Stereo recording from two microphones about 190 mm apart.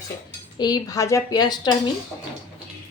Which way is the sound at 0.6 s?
20° left (ahead or behind).